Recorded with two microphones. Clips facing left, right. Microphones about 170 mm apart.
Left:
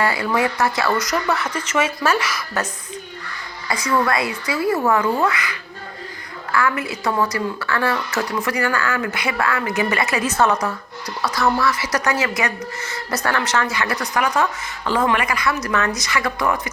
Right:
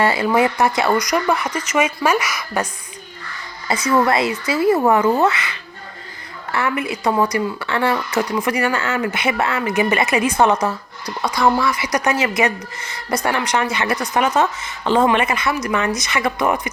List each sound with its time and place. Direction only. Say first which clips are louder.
0.0 s speech: right 4 dB; 25° right (ahead or behind)
3.7 s speech: right 3 dB; 20° right (ahead or behind)